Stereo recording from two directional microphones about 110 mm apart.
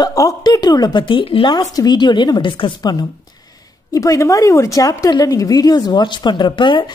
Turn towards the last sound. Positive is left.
turn(degrees=50)  # may be behind; listen again after turning